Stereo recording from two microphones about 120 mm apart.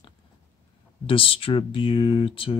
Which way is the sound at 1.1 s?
50° left (ahead or behind).